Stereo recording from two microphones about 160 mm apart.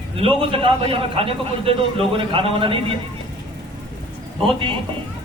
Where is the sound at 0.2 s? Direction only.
35° right (ahead or behind).